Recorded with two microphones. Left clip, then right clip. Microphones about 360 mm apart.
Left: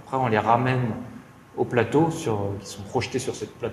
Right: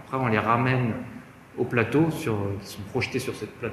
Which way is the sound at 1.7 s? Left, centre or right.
Left.